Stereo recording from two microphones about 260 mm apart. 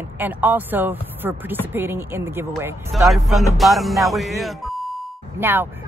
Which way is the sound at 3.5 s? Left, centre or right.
Centre.